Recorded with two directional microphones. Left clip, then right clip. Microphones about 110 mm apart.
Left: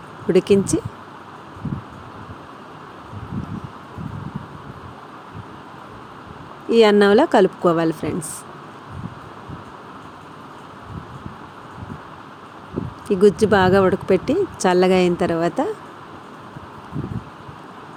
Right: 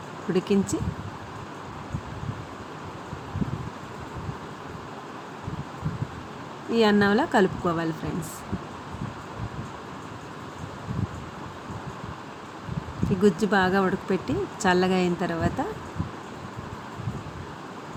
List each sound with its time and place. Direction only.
0.3 s speech: 90° left
6.7 s speech: 90° left
13.1 s speech: 80° left